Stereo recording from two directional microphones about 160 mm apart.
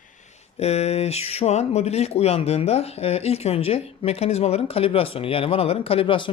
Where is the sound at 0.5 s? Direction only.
40° left (ahead or behind).